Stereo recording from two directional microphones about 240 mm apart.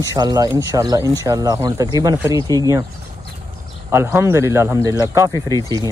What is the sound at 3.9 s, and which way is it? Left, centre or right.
Speech, centre.